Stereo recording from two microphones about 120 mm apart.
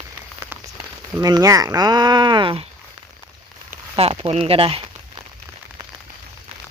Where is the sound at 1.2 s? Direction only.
30° right (ahead or behind).